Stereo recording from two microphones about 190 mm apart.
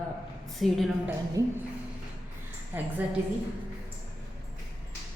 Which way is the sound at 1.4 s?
15° right (ahead or behind).